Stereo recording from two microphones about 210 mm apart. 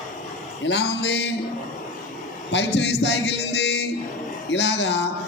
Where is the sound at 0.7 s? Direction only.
55° left (ahead or behind).